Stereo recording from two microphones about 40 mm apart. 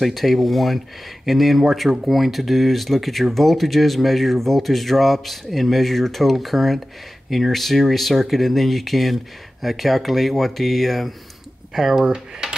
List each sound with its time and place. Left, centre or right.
0.0 s speech: centre
11.7 s speech: centre